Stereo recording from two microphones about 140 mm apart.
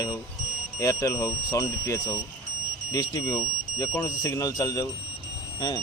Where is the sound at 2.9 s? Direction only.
25° left (ahead or behind).